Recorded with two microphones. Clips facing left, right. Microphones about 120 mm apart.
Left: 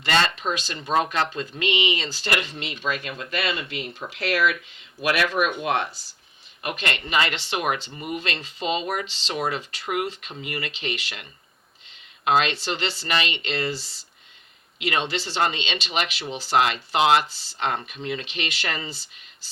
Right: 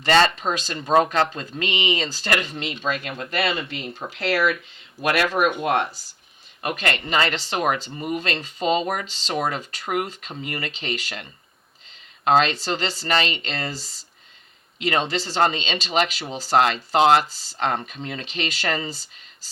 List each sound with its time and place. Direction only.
0.0 s speech: 40° right (ahead or behind)